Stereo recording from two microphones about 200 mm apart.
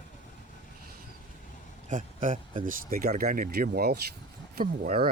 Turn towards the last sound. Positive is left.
turn(degrees=-50)  # may be behind; listen again after turning